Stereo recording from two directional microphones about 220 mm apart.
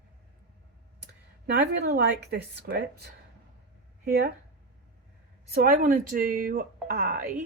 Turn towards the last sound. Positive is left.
turn(degrees=-40)  # may be behind; listen again after turning